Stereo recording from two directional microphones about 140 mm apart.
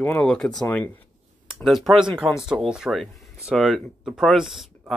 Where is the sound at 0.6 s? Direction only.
15° left (ahead or behind).